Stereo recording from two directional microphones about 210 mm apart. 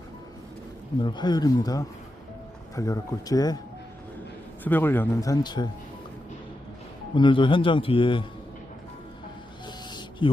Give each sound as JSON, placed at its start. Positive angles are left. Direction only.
{"t": 1.0, "sound": "speech", "side_deg": 20}
{"t": 4.6, "sound": "speech", "side_deg": 10}
{"t": 7.2, "sound": "speech", "side_deg": 25}
{"t": 9.6, "sound": "a sound", "side_deg": 20}